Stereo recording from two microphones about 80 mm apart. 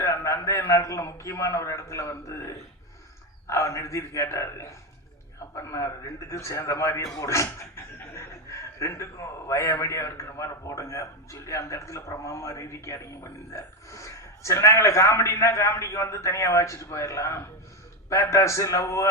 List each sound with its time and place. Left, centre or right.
0.0 s a man's voice: left